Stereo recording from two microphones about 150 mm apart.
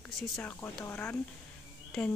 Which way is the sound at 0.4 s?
15° left (ahead or behind).